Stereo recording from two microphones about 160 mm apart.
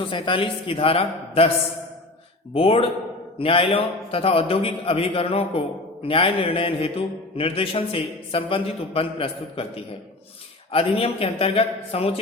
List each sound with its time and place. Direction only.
0.0 s a man's voice: 30° left (ahead or behind)
2.5 s a man's voice: 35° left (ahead or behind)
10.7 s a man's voice: 35° left (ahead or behind)